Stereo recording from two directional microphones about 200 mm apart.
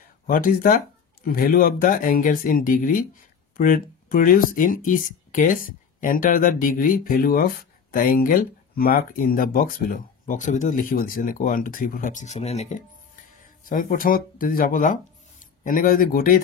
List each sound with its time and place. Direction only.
0.3 s speech: 45° left (ahead or behind)